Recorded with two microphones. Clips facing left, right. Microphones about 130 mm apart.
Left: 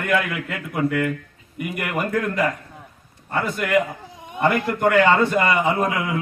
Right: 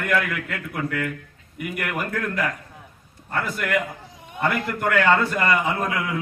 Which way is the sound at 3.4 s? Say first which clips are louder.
Left 2 dB; centre (ahead or behind).